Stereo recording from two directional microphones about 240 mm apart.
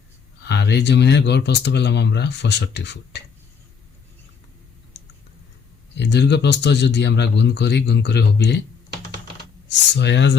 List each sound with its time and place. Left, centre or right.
0.4 s speech: left
4.9 s clicking: left
6.0 s speech: left
9.6 s speech: left